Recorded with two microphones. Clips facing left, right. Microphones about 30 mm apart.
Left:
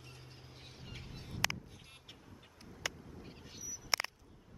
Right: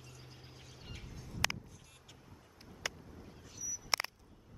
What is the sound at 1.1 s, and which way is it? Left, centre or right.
Bird, left.